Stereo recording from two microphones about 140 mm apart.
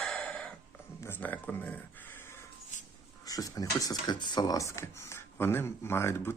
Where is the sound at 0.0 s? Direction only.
10° left (ahead or behind).